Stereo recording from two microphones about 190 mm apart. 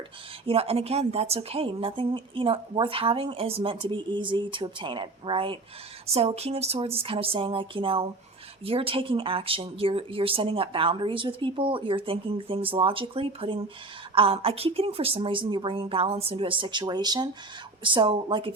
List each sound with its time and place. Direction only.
0.4 s a woman's voice: 30° right (ahead or behind)